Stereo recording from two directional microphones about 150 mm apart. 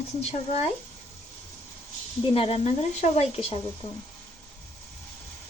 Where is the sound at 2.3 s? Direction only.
40° left (ahead or behind).